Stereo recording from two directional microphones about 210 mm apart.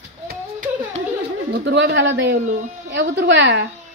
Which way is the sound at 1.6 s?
55° right (ahead or behind).